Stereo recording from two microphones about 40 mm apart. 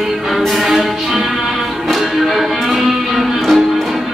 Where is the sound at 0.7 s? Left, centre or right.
Centre.